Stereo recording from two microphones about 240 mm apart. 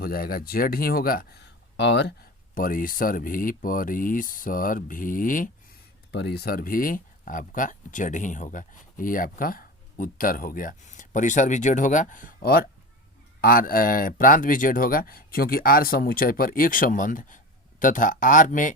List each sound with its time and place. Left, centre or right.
0.0 s speech: left